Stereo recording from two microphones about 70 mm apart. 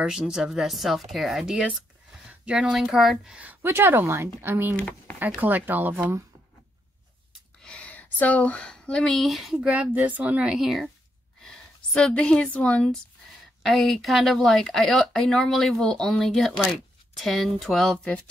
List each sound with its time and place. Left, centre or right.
0.0 s speech: centre
2.4 s speech: centre
3.6 s speech: right
4.7 s speech: centre
5.4 s speech: right
5.9 s speech: right
7.6 s speech: centre
9.7 s speech: right; by 10.9 s centre
11.4 s a sound: centre
12.2 s speech: centre
13.6 s speech: centre